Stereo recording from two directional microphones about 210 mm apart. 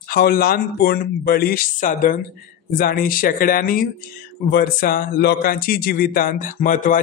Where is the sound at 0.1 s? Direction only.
45° left (ahead or behind).